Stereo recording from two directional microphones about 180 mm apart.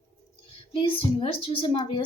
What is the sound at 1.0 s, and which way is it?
A woman's voice, 30° left (ahead or behind).